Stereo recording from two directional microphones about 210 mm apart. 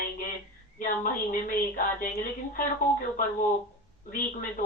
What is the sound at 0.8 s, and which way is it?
Speech, 40° left (ahead or behind).